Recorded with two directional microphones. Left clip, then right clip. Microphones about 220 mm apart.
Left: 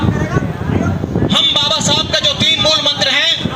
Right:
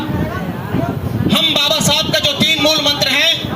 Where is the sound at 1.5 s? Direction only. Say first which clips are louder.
Even; 30° right (ahead or behind).